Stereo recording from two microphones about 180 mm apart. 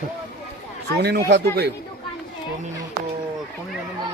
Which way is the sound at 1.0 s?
70° right (ahead or behind).